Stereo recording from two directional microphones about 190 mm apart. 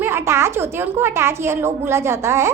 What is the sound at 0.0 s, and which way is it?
A woman's voice, 10° right (ahead or behind).